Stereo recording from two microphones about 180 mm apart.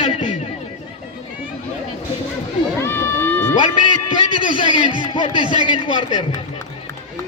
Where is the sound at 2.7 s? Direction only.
15° left (ahead or behind).